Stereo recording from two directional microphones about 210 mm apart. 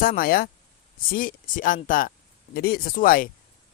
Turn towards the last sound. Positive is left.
turn(degrees=40)  # may be behind; listen again after turning